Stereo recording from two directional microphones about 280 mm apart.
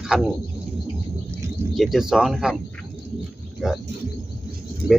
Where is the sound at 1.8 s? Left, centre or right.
Centre.